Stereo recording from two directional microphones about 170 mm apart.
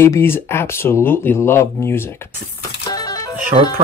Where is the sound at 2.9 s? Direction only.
20° left (ahead or behind).